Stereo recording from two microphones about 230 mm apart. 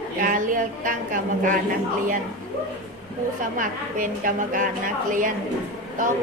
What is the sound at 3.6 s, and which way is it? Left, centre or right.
A woman's voice, right.